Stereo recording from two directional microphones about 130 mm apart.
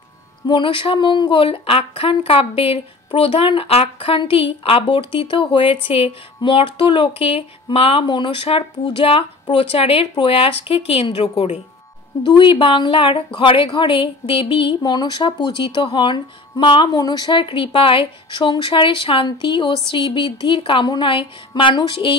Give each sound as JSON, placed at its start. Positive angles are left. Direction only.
{"t": 0.5, "sound": "speech", "side_deg": 40}
{"t": 12.2, "sound": "a woman's voice", "side_deg": 40}